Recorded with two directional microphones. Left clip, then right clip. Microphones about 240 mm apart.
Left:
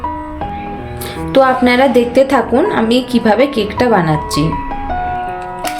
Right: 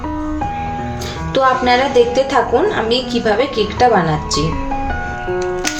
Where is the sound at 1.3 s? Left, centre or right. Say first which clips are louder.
Left 3 dB; left.